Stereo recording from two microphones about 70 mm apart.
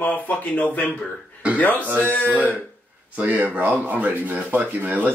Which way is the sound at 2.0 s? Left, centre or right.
Left.